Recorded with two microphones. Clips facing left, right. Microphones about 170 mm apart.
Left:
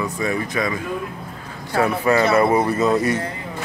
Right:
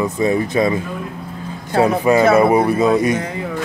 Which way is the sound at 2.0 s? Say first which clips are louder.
Right 4 dB; 15° right (ahead or behind).